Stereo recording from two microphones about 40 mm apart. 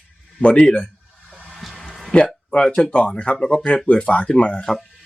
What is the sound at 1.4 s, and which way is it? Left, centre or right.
Vehicle, centre.